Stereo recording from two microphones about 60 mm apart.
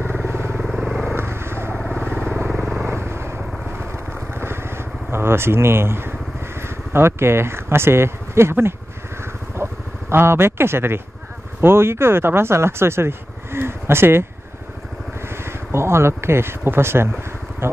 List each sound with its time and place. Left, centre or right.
0.0 s vehicle: right
0.6 s vehicle: centre
1.1 s vehicle: right
1.9 s motorcycle: centre
2.5 s vehicle: centre
2.8 s vehicle: right
6.6 s speech: right
9.2 s vehicle: right
11.6 s speech: right
15.2 s speech: right